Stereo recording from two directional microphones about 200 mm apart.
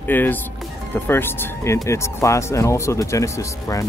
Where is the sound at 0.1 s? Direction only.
10° left (ahead or behind).